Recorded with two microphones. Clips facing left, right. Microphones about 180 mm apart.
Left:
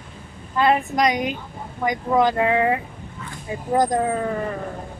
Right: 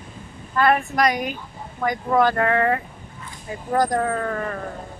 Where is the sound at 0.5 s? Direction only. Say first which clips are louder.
Even; 20° left (ahead or behind).